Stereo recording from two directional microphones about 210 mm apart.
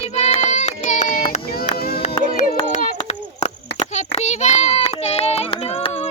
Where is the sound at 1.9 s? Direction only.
30° left (ahead or behind).